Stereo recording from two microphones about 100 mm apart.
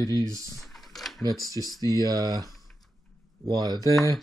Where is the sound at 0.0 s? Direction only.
35° right (ahead or behind).